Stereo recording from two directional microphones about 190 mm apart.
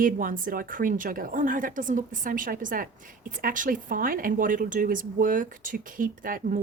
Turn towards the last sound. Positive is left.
turn(degrees=-45)  # may be behind; listen again after turning